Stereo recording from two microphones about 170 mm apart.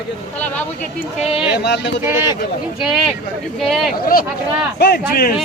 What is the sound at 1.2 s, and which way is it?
Speech, 35° left (ahead or behind).